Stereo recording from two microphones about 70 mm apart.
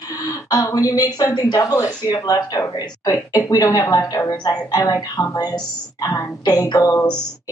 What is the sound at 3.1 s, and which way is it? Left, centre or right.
A woman's voice, left.